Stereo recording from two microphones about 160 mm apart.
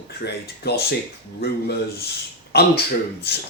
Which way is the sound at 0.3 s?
90° left.